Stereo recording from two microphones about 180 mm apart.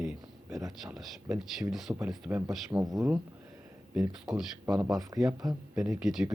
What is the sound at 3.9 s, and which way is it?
Speech, 5° right (ahead or behind).